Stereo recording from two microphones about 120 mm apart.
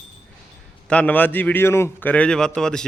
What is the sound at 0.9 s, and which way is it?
A man's voice, 10° left (ahead or behind).